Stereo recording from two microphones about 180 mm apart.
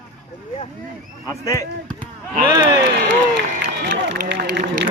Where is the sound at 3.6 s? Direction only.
70° right (ahead or behind).